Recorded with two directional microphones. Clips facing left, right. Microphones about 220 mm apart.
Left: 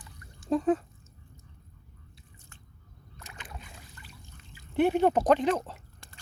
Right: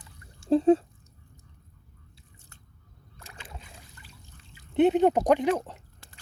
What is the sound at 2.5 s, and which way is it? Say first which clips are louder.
Biting: left 1 dB; 40° right (ahead or behind).